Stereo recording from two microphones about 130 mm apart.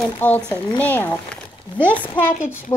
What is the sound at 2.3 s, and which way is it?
Speech, 70° left (ahead or behind).